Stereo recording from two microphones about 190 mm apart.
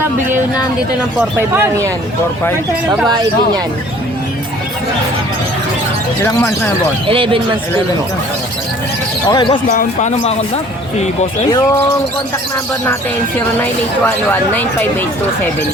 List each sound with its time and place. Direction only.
1.4 s speech: 15° right (ahead or behind)
7.1 s speech: 30° right (ahead or behind)
9.3 s speech: 25° left (ahead or behind)
9.6 s speech: 40° left (ahead or behind)
13.6 s a woman's voice: 10° left (ahead or behind)